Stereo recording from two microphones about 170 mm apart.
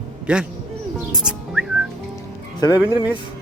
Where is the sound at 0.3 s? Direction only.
5° right (ahead or behind).